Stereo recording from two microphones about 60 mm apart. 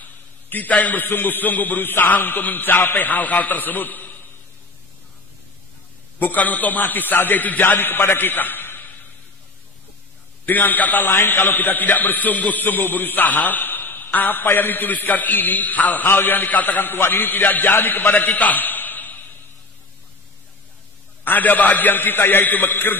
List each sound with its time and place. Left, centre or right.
0.5 s a man's voice: left
6.1 s a man's voice: left
10.4 s a man's voice: left
21.2 s a man's voice: left